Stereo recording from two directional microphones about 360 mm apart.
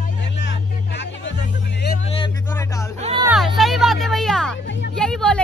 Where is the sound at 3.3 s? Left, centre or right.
Centre.